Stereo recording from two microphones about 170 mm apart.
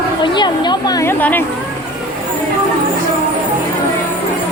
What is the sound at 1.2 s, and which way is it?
Speech, 10° left (ahead or behind).